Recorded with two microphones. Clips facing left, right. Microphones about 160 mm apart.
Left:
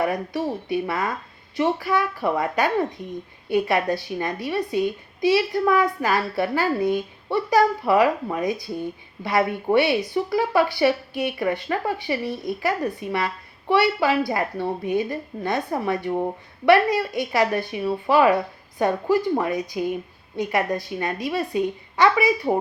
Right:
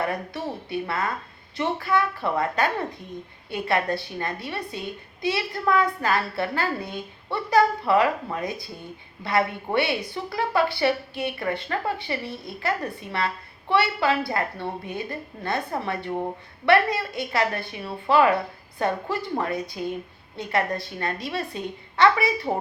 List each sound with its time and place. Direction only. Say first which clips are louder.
0.0 s speech: left 4 dB; 15° left (ahead or behind)